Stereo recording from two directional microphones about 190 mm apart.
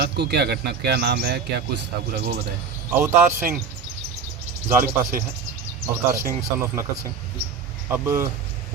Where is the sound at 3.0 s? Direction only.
10° right (ahead or behind).